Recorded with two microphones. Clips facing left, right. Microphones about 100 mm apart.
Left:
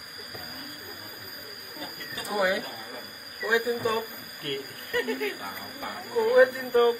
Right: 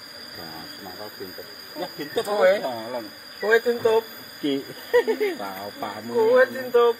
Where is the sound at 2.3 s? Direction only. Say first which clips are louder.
Right 8 dB; 45° right (ahead or behind).